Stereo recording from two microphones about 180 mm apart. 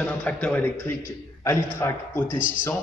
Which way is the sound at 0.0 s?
10° left (ahead or behind).